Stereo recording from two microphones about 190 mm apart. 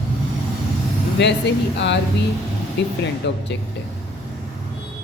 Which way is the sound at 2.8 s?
70° left (ahead or behind).